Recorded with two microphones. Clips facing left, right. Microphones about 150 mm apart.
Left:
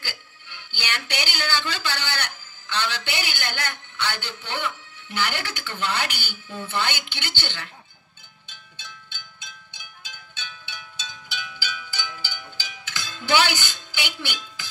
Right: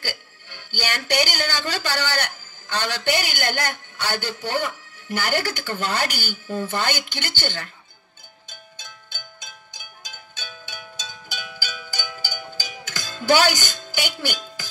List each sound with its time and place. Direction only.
0.0 s speech: 45° right (ahead or behind)
8.5 s music: 45° right (ahead or behind)